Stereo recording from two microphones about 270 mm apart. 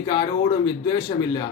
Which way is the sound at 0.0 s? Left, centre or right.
Centre.